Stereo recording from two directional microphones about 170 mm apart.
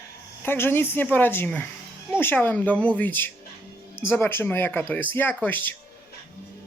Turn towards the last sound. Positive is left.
turn(degrees=10)  # may be behind; listen again after turning